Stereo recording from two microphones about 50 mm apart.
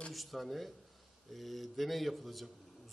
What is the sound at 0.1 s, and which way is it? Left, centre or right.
A man's voice, centre.